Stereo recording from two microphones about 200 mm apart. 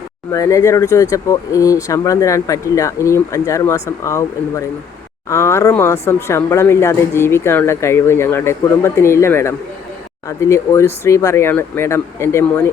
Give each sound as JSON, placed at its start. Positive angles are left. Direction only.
{"t": 0.3, "sound": "speech", "side_deg": 15}